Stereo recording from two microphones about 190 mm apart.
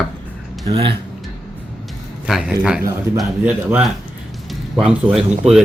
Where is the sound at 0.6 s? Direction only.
25° right (ahead or behind).